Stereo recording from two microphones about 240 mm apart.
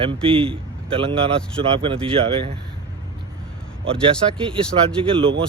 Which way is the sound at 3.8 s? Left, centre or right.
Right.